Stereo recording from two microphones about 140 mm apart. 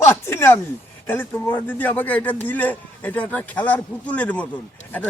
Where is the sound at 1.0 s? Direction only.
15° left (ahead or behind).